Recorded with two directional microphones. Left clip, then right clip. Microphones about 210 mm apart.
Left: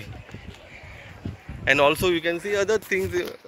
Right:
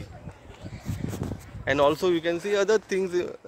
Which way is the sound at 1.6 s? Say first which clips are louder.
Left 3 dB; 10° right (ahead or behind).